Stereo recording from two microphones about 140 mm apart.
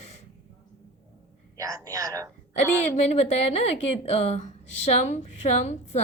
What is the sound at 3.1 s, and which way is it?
A woman's voice, 50° left (ahead or behind).